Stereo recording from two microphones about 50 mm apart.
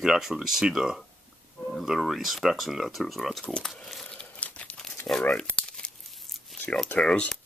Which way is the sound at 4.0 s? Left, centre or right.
Centre.